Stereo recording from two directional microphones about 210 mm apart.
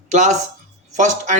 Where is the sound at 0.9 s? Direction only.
35° right (ahead or behind).